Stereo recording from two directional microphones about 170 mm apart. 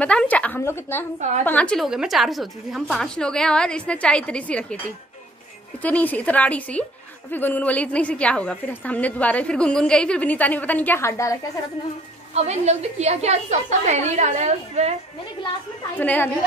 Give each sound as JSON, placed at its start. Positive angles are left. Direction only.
{"t": 0.0, "sound": "a woman's voice", "side_deg": 5}
{"t": 5.8, "sound": "a woman's voice", "side_deg": 10}
{"t": 12.4, "sound": "a woman's voice", "side_deg": -40}
{"t": 16.0, "sound": "a woman's voice", "side_deg": 10}